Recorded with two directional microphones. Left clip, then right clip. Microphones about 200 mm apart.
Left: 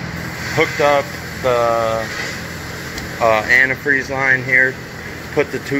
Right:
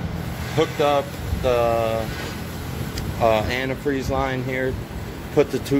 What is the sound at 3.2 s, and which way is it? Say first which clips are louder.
Speech: left 7 dB; 30° right (ahead or behind).